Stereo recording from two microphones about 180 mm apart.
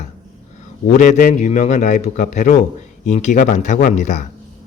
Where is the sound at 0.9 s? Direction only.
45° left (ahead or behind).